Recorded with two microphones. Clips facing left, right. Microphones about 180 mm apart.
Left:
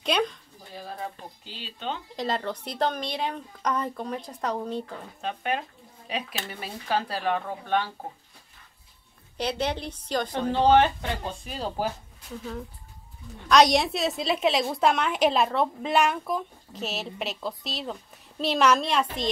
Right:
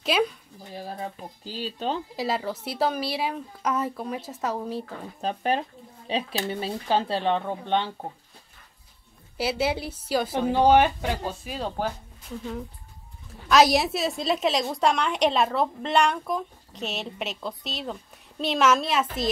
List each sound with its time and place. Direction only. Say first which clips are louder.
0.0 s a sound: right 2 dB; 5° right (ahead or behind)
1.4 s speech: right 7 dB; 40° right (ahead or behind)
2.1 s a woman's voice: right 1 dB; 5° right (ahead or behind)
5.2 s speech: right 4 dB; 35° right (ahead or behind)
9.4 s a woman's voice: right 2 dB; 5° right (ahead or behind)
13.3 s a woman's voice: even; 5° right (ahead or behind)